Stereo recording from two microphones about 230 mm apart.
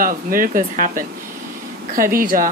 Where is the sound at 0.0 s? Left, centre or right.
Right.